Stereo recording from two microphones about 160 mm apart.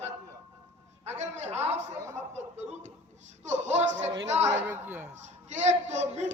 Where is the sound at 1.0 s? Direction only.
45° right (ahead or behind).